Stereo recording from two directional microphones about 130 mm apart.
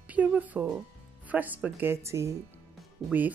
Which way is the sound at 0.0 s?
10° right (ahead or behind).